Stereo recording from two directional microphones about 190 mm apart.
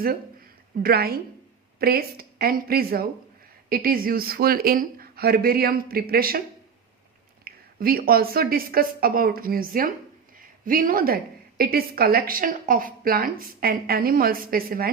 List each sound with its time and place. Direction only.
0.8 s a woman's voice: 55° right (ahead or behind)
7.4 s a woman's voice: 50° right (ahead or behind)